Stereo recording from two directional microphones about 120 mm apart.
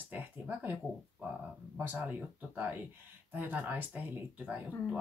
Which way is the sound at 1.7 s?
15° right (ahead or behind).